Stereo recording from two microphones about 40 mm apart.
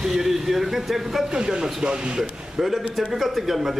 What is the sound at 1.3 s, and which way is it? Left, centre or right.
Speech, centre.